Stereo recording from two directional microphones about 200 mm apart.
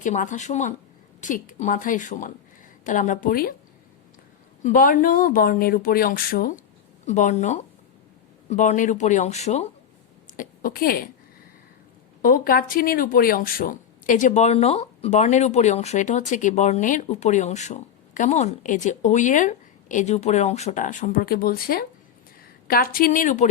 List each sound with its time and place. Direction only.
0.0 s speech: 40° left (ahead or behind)
4.6 s a woman's voice: 40° left (ahead or behind)
12.2 s speech: 45° left (ahead or behind)